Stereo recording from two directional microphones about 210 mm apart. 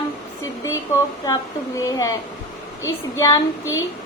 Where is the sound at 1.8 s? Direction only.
15° left (ahead or behind).